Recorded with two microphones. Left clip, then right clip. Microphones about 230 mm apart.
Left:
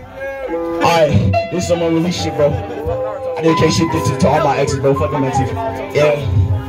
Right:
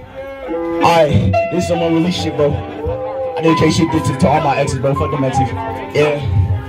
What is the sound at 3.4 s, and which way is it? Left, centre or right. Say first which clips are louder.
Music: even; right.